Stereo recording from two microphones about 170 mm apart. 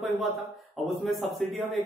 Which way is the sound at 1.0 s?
Centre (ahead or behind).